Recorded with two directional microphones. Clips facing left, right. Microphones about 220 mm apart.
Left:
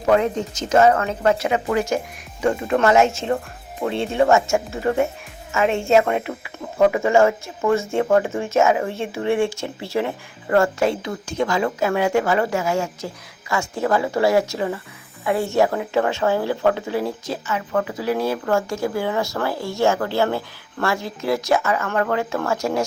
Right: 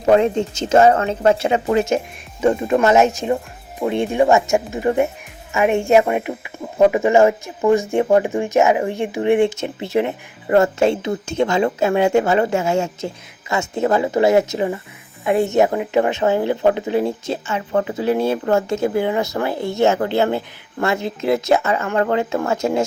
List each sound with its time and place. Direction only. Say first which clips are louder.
0.0 s speech: right 4 dB; 25° right (ahead or behind)